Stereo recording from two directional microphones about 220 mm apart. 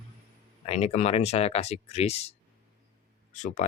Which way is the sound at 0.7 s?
30° left (ahead or behind).